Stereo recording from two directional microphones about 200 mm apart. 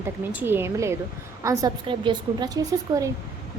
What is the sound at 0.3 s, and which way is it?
A woman's voice, 10° right (ahead or behind).